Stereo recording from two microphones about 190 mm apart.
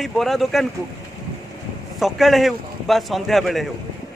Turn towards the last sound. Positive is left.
turn(degrees=0)  # may be behind; listen again after turning